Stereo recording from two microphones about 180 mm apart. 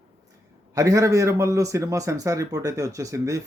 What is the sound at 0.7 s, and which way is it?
A man's voice, 20° right (ahead or behind).